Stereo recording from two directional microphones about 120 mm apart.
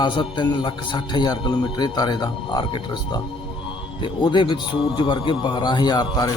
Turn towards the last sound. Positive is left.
turn(degrees=35)  # may be behind; listen again after turning